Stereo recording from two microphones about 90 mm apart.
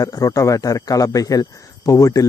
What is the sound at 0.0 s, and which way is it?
Speech, 40° left (ahead or behind).